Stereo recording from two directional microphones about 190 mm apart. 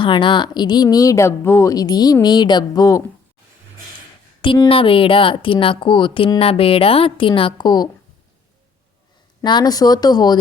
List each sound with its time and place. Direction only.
0.0 s a woman's voice: 25° left (ahead or behind)
4.4 s a woman's voice: 25° left (ahead or behind)
9.4 s a woman's voice: 25° left (ahead or behind)